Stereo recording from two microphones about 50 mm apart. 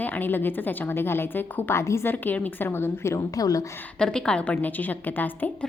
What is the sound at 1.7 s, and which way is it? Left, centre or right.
Speech, left.